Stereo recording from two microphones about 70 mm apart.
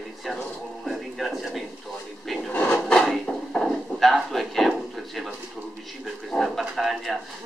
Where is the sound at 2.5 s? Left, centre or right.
Left.